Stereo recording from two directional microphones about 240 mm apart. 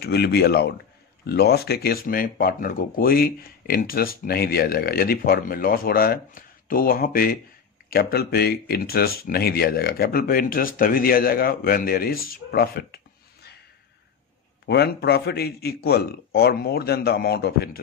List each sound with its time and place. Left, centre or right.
0.0 s speech: left
14.7 s speech: left